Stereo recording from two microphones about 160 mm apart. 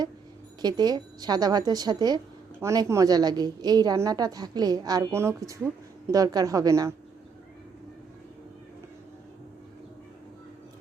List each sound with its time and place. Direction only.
0.6 s a woman's voice: 25° right (ahead or behind)